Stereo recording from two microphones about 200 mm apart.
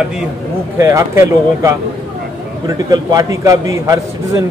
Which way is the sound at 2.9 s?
15° right (ahead or behind).